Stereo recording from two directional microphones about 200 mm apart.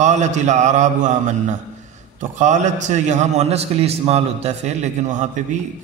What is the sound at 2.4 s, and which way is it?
A man's voice, 35° right (ahead or behind).